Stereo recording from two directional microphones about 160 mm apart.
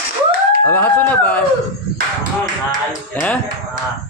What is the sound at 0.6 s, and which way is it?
Speech, 10° left (ahead or behind).